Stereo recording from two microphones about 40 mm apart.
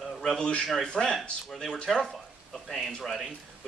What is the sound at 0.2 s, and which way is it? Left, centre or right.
Speech, centre.